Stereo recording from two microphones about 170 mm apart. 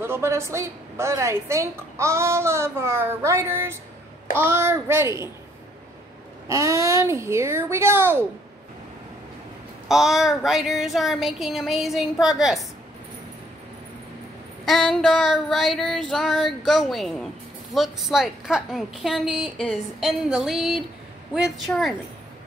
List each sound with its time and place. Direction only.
0.0 s a woman's voice: 15° right (ahead or behind)
6.4 s a woman's voice: 20° right (ahead or behind)
9.8 s a woman's voice: centre (ahead or behind)
14.6 s a woman's voice: centre (ahead or behind)